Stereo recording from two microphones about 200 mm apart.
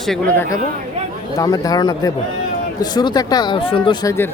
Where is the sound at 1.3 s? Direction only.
20° left (ahead or behind).